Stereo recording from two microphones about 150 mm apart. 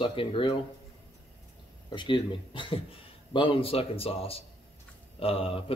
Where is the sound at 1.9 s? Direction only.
30° left (ahead or behind).